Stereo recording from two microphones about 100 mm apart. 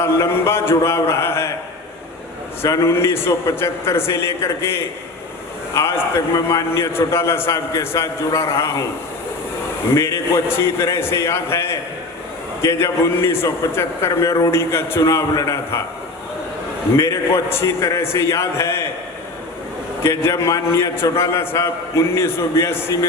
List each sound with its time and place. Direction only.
0.0 s a man's voice: 25° left (ahead or behind)
2.6 s a man's voice: 30° left (ahead or behind)
9.9 s a man's voice: 25° left (ahead or behind)
17.0 s a man's voice: 25° left (ahead or behind)
20.0 s a man's voice: 25° left (ahead or behind)